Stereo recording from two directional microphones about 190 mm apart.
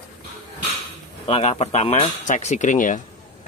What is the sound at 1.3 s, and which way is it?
Speech, 35° left (ahead or behind).